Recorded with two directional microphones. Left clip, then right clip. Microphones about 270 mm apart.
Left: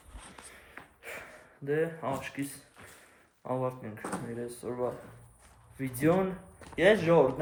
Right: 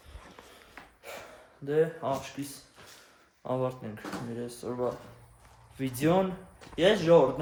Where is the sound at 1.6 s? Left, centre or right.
Centre.